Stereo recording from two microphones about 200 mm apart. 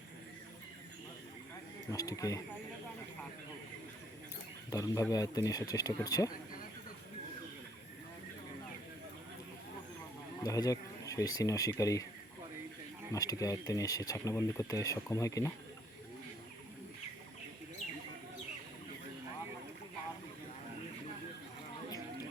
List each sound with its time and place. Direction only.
1.9 s speech: 15° left (ahead or behind)
4.7 s speech: 15° left (ahead or behind)
10.4 s speech: 15° left (ahead or behind)
13.1 s speech: 15° left (ahead or behind)